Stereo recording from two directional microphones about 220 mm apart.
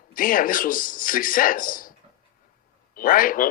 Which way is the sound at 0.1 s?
40° left (ahead or behind).